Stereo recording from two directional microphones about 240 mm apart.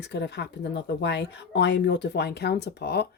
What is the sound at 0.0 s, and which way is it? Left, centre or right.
Speech, left.